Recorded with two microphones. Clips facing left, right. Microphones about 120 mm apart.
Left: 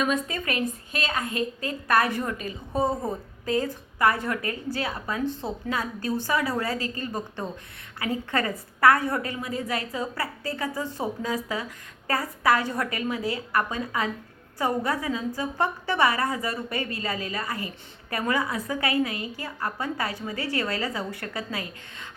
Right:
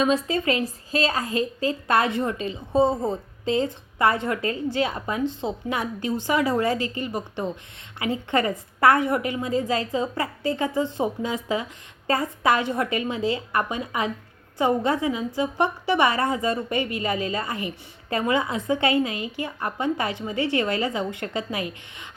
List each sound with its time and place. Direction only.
0.0 s a woman's voice: 30° right (ahead or behind)